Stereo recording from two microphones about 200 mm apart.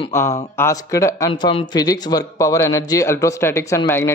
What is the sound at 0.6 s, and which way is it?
Speech, 15° left (ahead or behind).